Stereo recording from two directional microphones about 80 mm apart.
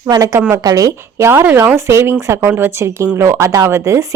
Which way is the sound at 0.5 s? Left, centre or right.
Right.